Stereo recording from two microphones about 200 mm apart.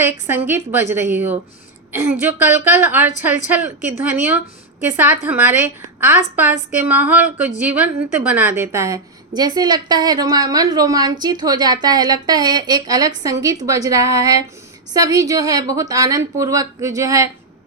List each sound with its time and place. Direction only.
0.0 s a woman's voice: 10° right (ahead or behind)